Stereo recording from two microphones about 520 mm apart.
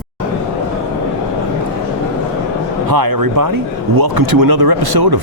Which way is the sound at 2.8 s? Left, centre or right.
Right.